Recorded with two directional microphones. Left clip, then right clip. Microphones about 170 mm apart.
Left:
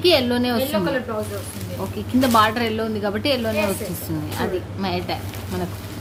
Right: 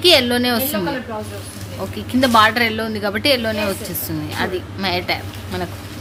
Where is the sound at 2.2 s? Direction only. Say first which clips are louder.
Right 4 dB; 10° right (ahead or behind).